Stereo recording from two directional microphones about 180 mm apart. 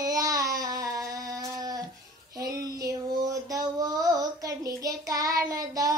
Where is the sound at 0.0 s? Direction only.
20° right (ahead or behind).